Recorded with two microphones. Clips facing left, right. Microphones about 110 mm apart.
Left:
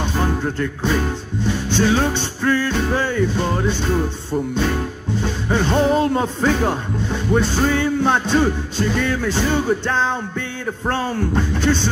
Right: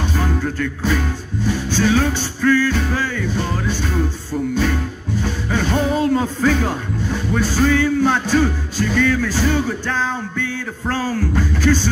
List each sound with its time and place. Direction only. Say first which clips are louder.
0.2 s music: left 2 dB; 25° left (ahead or behind)